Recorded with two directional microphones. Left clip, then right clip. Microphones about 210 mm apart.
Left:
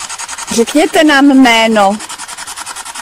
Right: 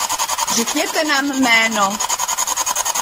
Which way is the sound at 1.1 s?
50° left (ahead or behind).